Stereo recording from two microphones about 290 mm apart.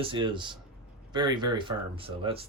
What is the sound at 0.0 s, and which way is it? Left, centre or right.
Speech, centre.